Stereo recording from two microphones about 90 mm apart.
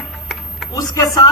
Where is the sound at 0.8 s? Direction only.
50° left (ahead or behind).